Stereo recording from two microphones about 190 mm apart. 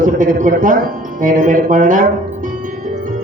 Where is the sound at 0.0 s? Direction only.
45° right (ahead or behind).